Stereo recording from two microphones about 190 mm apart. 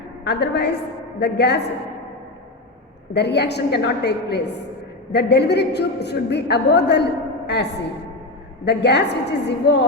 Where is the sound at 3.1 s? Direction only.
60° left (ahead or behind).